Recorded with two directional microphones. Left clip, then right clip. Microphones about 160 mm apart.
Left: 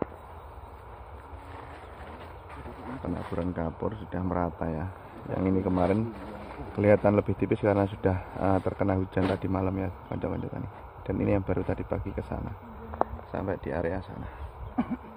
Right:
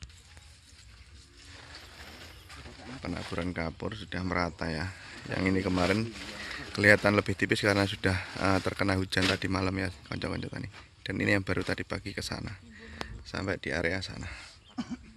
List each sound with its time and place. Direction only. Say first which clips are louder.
3.0 s speech: left 2 dB; 20° right (ahead or behind)
5.7 s speech: left 3 dB; 30° right (ahead or behind)
6.7 s speech: even; 15° right (ahead or behind)
13.3 s speech: left 1 dB; 30° right (ahead or behind)